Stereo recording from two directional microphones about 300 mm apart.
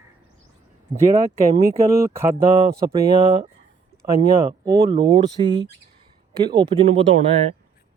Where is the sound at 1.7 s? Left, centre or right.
Centre.